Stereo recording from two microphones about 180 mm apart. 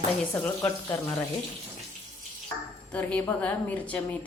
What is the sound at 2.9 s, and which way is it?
Speech, 10° left (ahead or behind).